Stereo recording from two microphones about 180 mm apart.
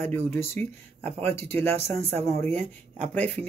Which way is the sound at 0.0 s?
10° left (ahead or behind).